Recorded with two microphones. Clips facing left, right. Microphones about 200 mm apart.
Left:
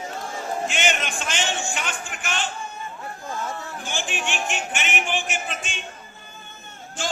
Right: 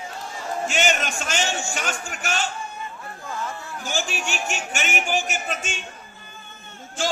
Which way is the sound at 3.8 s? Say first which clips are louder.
Right 3 dB; 40° right (ahead or behind).